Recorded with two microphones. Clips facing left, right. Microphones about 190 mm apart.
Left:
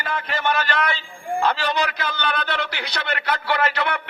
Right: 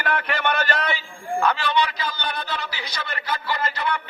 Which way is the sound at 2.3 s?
70° left (ahead or behind).